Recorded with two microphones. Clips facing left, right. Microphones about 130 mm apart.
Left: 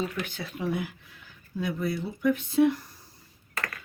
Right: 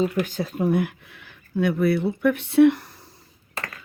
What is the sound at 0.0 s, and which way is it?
Speech, 40° right (ahead or behind).